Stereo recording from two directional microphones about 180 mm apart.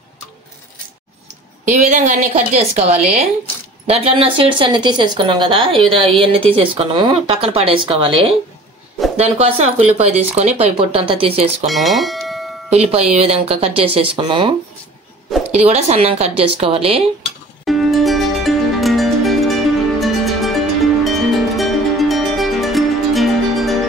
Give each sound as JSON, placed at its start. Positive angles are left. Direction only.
{"t": 1.7, "sound": "speech", "side_deg": -40}
{"t": 11.6, "sound": "speech", "side_deg": 0}
{"t": 12.6, "sound": "speech", "side_deg": -35}
{"t": 15.5, "sound": "speech", "side_deg": -35}
{"t": 17.6, "sound": "music", "side_deg": 0}